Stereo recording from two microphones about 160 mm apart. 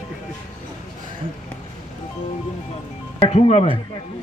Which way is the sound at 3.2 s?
40° left (ahead or behind).